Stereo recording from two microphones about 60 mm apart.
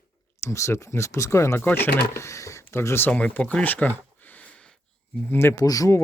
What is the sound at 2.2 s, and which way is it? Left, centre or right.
Speech, left.